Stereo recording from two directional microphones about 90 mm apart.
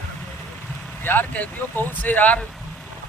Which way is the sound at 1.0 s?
20° left (ahead or behind).